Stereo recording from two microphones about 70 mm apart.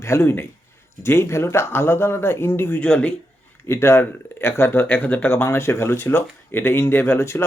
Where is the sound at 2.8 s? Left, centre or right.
Centre.